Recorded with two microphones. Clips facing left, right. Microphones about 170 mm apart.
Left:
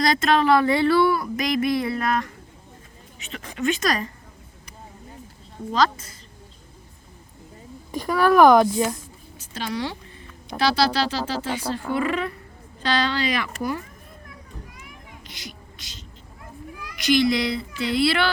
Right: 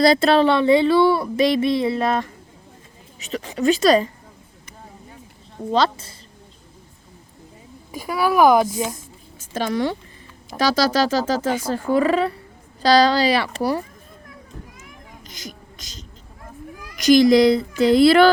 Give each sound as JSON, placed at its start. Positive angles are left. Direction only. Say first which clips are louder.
{"t": 0.0, "sound": "speech", "louder": "right 5 dB", "side_deg": -30}
{"t": 3.2, "sound": "speech", "louder": "right 5 dB", "side_deg": -40}
{"t": 5.7, "sound": "speech", "louder": "right 2 dB", "side_deg": -30}
{"t": 7.9, "sound": "a woman's voice", "louder": "left 2 dB", "side_deg": -10}
{"t": 9.4, "sound": "speech", "louder": "right 6 dB", "side_deg": -50}
{"t": 15.3, "sound": "a sound", "louder": "right 5 dB", "side_deg": -45}
{"t": 17.0, "sound": "speech", "louder": "right 8 dB", "side_deg": -40}